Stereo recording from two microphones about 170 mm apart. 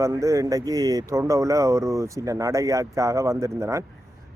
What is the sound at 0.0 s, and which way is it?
A man's voice, 20° right (ahead or behind).